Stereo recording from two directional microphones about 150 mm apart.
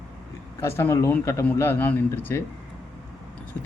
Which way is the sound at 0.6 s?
15° left (ahead or behind).